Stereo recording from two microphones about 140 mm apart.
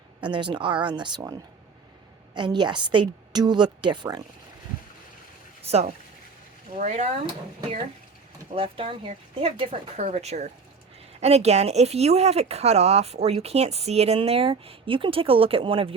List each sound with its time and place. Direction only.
0.2 s a woman's voice: 35° right (ahead or behind)
5.6 s speech: 50° right (ahead or behind)
8.5 s a woman's voice: 40° right (ahead or behind)